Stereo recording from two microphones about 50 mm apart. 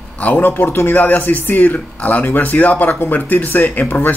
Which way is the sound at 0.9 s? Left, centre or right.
Left.